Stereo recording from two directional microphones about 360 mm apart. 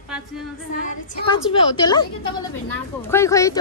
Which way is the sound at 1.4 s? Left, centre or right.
Centre.